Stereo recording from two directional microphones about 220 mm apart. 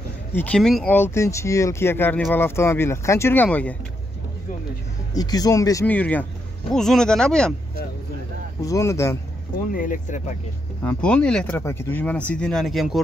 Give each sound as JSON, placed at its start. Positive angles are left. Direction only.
{"t": 0.3, "sound": "speech", "side_deg": 5}
{"t": 5.1, "sound": "speech", "side_deg": 15}
{"t": 8.6, "sound": "speech", "side_deg": 15}
{"t": 9.7, "sound": "speech", "side_deg": 40}
{"t": 10.8, "sound": "speech", "side_deg": 5}